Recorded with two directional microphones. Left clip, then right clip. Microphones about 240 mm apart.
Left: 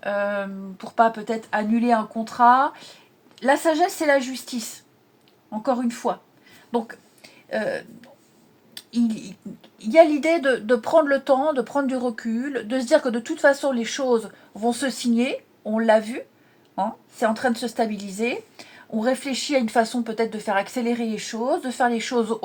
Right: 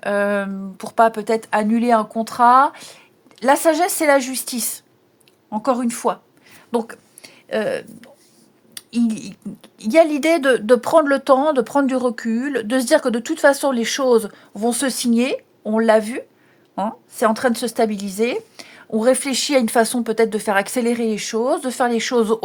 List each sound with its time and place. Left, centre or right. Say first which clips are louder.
0.0 s a woman's voice: right 5 dB; right
6.7 s a sound: right 4 dB; right
8.7 s speech: right 3 dB; right